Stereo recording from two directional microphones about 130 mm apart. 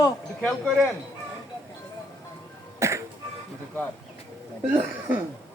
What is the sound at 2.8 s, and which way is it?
Music, 20° right (ahead or behind).